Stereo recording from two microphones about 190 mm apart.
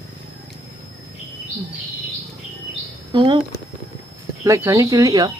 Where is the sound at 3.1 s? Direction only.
25° right (ahead or behind).